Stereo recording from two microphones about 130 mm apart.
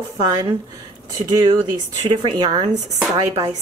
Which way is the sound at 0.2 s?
30° right (ahead or behind).